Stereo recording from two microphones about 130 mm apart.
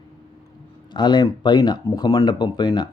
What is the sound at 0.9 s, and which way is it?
Speech, 35° left (ahead or behind).